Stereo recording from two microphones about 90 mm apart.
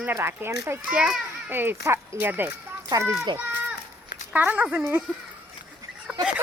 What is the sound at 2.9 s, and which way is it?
Speech, 35° right (ahead or behind).